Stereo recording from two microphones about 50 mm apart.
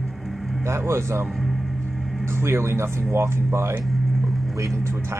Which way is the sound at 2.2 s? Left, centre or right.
Right.